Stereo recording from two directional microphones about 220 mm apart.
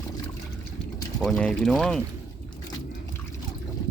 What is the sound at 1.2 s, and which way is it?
Speech, 5° left (ahead or behind).